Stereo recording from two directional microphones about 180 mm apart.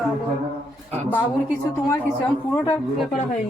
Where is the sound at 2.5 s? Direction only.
15° left (ahead or behind).